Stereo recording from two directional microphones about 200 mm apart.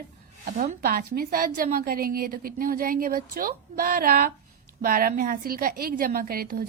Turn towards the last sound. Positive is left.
turn(degrees=-45)  # may be behind; listen again after turning